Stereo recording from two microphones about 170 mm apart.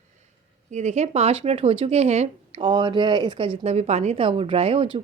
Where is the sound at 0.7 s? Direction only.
45° right (ahead or behind).